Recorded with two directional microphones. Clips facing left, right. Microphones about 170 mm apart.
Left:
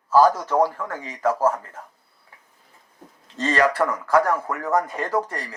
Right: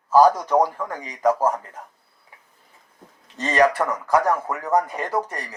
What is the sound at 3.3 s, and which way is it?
Speech, 15° right (ahead or behind).